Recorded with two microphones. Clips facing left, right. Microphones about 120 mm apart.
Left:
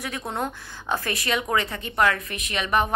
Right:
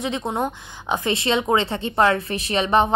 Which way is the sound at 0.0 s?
20° right (ahead or behind).